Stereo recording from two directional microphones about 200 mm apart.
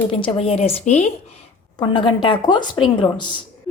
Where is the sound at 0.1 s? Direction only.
30° left (ahead or behind).